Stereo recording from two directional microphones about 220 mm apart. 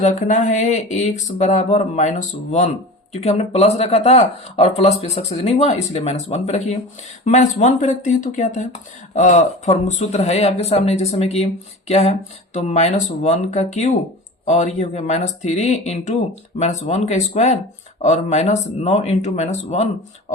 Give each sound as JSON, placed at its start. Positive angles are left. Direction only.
{"t": 0.0, "sound": "speech", "side_deg": 35}